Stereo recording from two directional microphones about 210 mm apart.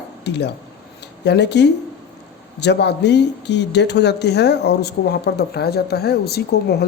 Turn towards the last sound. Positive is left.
turn(degrees=50)  # may be behind; listen again after turning